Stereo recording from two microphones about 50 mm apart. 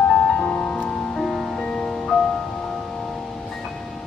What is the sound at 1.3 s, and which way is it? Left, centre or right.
Music, centre.